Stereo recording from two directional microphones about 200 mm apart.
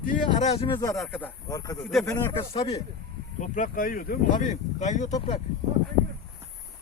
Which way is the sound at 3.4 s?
40° left (ahead or behind).